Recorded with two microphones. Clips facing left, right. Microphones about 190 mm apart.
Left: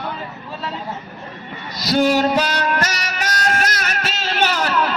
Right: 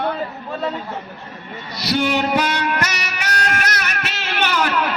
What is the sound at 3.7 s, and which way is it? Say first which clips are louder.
Music: left 1 dB; 60° right (ahead or behind).